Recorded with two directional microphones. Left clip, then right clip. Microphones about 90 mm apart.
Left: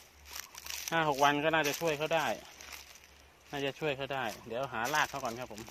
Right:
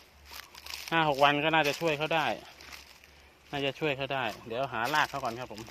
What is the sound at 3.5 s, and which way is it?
Speech, 90° right.